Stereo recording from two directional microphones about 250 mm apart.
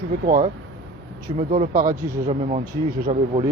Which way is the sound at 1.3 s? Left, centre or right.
Right.